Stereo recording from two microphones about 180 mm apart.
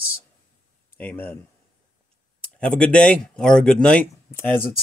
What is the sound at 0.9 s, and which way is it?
Speech, 10° left (ahead or behind).